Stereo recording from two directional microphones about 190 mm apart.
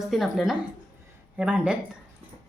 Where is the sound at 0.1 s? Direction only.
Centre (ahead or behind).